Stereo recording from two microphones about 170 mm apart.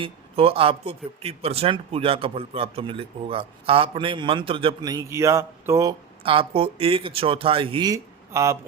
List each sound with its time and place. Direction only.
0.0 s speech: 35° right (ahead or behind); by 5.9 s 15° right (ahead or behind)
6.2 s speech: 30° right (ahead or behind); by 8.5 s 15° right (ahead or behind)